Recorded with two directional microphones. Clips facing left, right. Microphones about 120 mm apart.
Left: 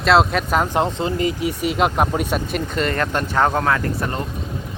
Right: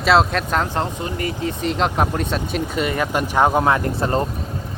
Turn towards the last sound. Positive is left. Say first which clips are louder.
# right 2 dB
turn(degrees=-20)  # may be behind; listen again after turning